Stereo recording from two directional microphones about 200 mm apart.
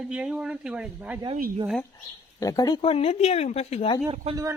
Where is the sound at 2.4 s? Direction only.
15° left (ahead or behind).